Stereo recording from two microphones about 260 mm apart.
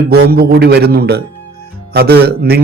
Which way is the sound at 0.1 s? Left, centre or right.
Right.